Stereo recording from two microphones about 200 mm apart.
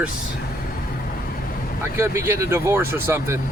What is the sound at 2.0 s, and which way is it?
Speech, 10° right (ahead or behind).